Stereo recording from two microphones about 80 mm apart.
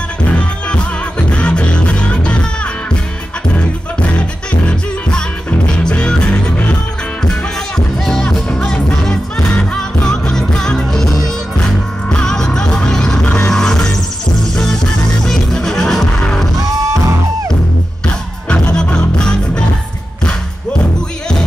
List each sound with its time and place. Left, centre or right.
0.4 s music: centre
4.0 s music: centre
16.5 s music: right
18.0 s music: centre